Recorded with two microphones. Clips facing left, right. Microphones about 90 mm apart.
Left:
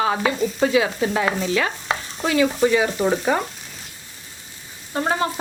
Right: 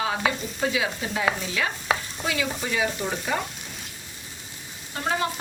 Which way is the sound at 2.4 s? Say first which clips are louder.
Left 11 dB; 50° left (ahead or behind).